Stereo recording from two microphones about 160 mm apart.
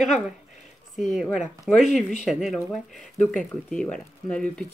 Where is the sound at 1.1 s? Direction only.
5° right (ahead or behind).